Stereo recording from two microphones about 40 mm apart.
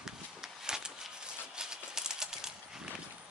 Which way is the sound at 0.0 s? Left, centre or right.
Centre.